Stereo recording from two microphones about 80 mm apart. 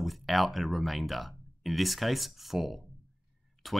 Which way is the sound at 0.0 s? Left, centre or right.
Centre.